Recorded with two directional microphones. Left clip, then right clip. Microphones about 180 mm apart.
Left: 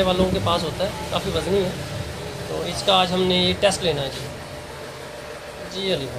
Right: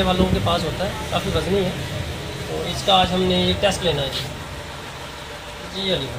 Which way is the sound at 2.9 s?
35° left (ahead or behind).